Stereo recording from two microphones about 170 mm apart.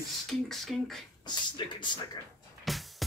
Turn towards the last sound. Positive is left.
turn(degrees=0)  # may be behind; listen again after turning